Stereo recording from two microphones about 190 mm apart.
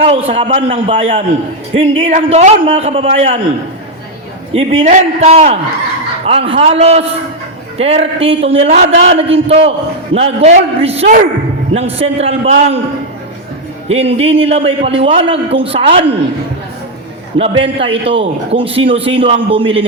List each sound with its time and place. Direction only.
0.3 s a man's voice: 30° right (ahead or behind)
4.5 s a man's voice: 30° right (ahead or behind)
13.8 s a man's voice: 30° right (ahead or behind)
17.3 s a man's voice: 30° right (ahead or behind)